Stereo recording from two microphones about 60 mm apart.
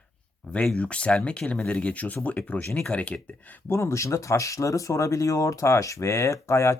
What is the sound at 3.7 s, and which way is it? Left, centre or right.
Speech, left.